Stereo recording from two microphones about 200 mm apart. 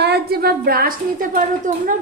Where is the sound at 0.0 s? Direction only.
55° right (ahead or behind).